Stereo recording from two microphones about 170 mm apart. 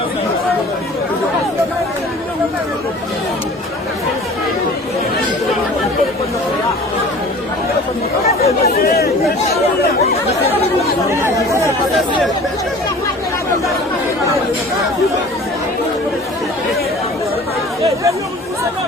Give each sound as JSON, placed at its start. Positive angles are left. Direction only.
{"t": 8.6, "sound": "speech", "side_deg": 60}
{"t": 11.1, "sound": "speech", "side_deg": -15}